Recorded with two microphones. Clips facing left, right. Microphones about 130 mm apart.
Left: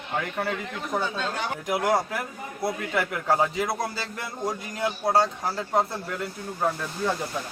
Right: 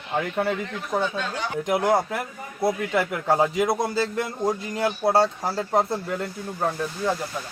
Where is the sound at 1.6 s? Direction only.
25° right (ahead or behind).